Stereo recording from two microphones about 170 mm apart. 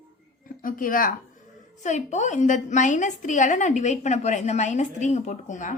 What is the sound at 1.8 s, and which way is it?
A woman's voice, 45° left (ahead or behind).